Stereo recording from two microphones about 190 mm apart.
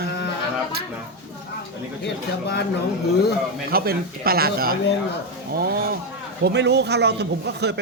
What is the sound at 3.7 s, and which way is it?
Speech, 50° right (ahead or behind).